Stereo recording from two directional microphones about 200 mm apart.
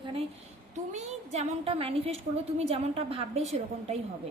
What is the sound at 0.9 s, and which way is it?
A woman's voice, 30° right (ahead or behind).